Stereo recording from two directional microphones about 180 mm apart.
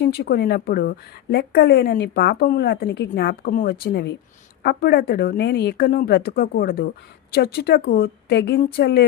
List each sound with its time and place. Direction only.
0.0 s a woman's voice: 65° left (ahead or behind)
3.8 s a woman's voice: 70° left (ahead or behind)